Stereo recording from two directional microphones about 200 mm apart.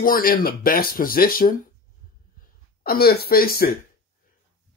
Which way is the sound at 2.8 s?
50° left (ahead or behind).